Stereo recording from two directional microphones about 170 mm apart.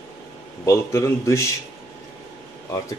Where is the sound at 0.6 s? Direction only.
15° left (ahead or behind).